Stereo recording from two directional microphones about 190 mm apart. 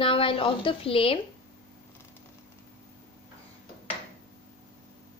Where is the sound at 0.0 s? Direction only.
30° left (ahead or behind).